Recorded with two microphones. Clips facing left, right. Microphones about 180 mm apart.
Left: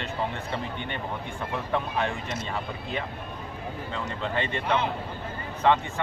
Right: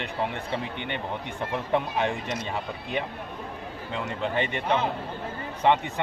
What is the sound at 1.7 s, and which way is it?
Speech, 15° right (ahead or behind).